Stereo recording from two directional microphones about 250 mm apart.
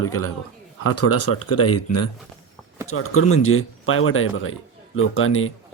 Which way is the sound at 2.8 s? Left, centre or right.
Left.